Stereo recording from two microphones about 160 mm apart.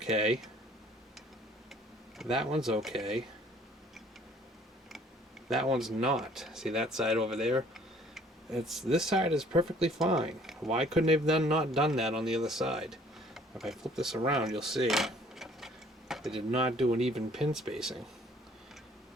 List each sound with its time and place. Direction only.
0.0 s speech: 5° right (ahead or behind)
1.7 s speech: centre (ahead or behind)
5.7 s speech: 5° right (ahead or behind)
7.7 s tick-tock: centre (ahead or behind)
9.6 s speech: 5° right (ahead or behind)